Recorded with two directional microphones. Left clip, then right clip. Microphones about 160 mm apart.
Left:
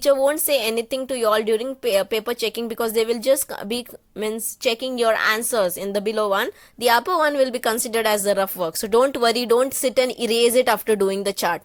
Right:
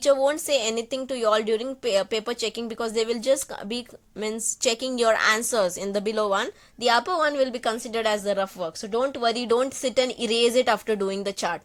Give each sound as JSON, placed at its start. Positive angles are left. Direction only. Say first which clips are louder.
{"t": 0.0, "sound": "a woman's voice", "louder": "left 3 dB", "side_deg": 20}
{"t": 6.8, "sound": "a woman's voice", "louder": "left 4 dB", "side_deg": 30}